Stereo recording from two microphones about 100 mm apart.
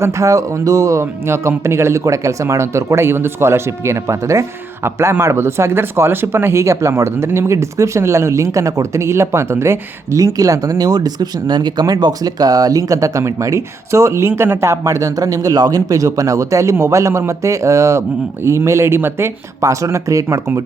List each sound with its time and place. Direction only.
0.0 s speech: 35° right (ahead or behind)